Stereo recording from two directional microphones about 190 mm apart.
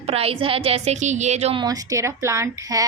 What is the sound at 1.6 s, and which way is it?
A woman's voice, 20° right (ahead or behind).